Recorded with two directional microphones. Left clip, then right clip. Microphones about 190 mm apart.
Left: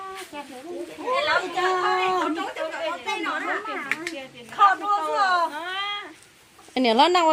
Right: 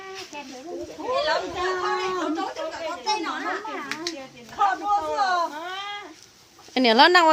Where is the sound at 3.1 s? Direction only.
50° right (ahead or behind).